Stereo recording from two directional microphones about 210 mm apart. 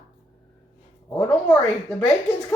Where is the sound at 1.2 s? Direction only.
5° left (ahead or behind).